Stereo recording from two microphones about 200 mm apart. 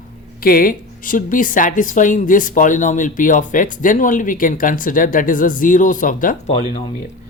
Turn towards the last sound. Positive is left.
turn(degrees=40)  # may be behind; listen again after turning